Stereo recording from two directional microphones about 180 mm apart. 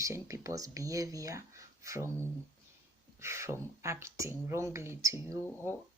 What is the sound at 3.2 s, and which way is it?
Speech, 15° right (ahead or behind).